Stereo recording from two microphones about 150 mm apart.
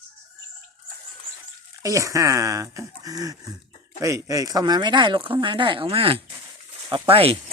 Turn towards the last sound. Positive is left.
turn(degrees=-40)  # may be behind; listen again after turning